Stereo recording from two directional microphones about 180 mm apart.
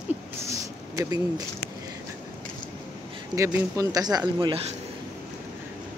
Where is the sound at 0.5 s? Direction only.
20° right (ahead or behind).